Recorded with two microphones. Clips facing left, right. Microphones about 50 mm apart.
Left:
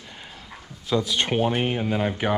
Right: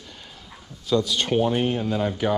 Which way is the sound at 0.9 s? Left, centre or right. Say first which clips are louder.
Right 1 dB; centre.